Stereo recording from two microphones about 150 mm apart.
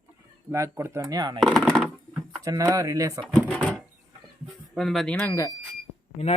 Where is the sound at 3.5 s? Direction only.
10° left (ahead or behind).